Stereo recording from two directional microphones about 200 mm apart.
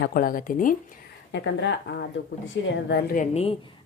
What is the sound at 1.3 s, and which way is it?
Speech, 60° left (ahead or behind).